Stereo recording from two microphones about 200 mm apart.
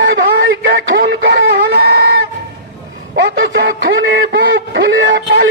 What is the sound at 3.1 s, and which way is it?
Speech, 70° right (ahead or behind).